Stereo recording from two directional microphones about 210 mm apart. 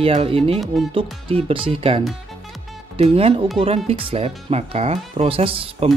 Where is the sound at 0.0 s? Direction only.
25° right (ahead or behind).